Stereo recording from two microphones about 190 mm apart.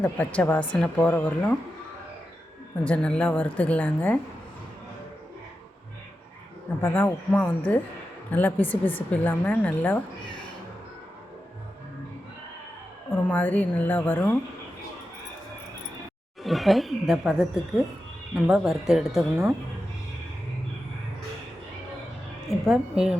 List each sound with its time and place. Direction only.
0.0 s a woman's voice: 5° left (ahead or behind)
2.8 s a woman's voice: 5° left (ahead or behind)
6.8 s a woman's voice: 10° left (ahead or behind)
13.2 s a woman's voice: 10° left (ahead or behind)
16.4 s speech: centre (ahead or behind)
22.4 s speech: centre (ahead or behind)